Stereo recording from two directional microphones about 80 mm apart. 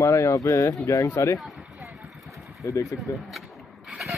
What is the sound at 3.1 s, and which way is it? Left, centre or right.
Speech, left.